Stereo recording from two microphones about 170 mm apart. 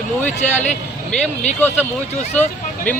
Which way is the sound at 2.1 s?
45° left (ahead or behind).